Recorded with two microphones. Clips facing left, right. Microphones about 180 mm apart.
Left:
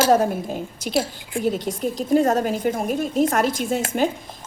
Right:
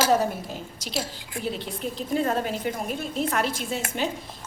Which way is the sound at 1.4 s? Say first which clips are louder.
Left 8 dB; 45° left (ahead or behind).